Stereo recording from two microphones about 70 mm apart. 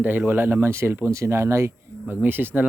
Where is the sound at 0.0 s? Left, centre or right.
Right.